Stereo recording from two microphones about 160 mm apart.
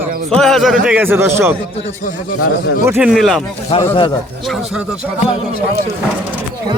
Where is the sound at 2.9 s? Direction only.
5° right (ahead or behind).